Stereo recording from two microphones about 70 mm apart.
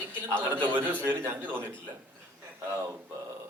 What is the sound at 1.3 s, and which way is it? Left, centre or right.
Speech, right.